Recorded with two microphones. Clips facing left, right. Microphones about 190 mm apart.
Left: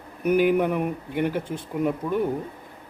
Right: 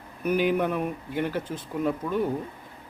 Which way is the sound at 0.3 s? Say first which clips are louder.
Left 4 dB; 10° left (ahead or behind).